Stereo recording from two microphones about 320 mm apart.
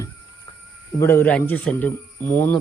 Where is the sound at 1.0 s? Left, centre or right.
Centre.